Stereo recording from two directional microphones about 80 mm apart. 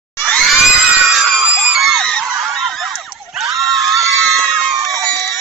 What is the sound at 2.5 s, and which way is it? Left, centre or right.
Screaming, centre.